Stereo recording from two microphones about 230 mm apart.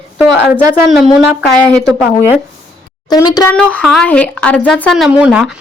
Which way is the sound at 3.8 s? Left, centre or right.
Centre.